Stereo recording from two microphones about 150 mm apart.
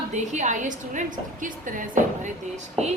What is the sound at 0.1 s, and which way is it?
A woman's voice, 50° right (ahead or behind).